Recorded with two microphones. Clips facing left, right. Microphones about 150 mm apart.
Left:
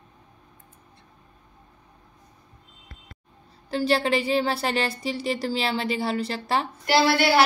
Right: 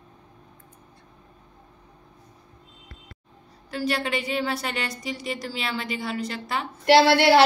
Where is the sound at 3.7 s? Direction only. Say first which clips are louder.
Left 4 dB; 30° left (ahead or behind).